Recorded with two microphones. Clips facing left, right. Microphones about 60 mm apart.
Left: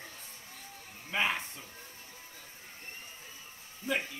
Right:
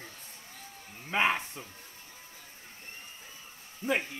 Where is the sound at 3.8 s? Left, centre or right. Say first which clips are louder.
Right 3 dB; right.